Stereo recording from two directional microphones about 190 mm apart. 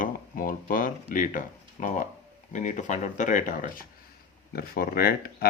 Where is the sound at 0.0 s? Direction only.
45° left (ahead or behind).